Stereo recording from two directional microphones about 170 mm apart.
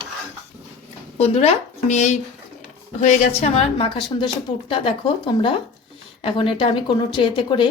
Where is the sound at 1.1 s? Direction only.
40° left (ahead or behind).